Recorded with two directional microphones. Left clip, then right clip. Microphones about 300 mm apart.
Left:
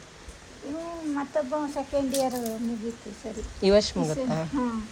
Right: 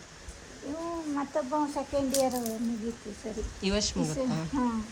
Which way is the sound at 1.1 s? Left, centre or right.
Right.